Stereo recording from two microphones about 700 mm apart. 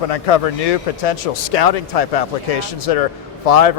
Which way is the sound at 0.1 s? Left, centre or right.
Left.